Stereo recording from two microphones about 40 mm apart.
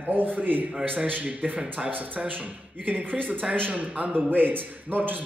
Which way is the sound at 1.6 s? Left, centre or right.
Right.